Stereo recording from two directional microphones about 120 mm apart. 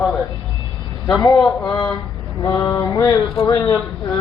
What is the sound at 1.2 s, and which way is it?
Mantra, 35° left (ahead or behind).